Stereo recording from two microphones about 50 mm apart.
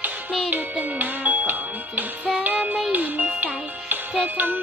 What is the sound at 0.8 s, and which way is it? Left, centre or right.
Music, right.